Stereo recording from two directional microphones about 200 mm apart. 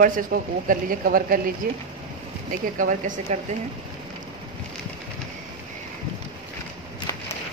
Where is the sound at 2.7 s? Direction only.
40° right (ahead or behind).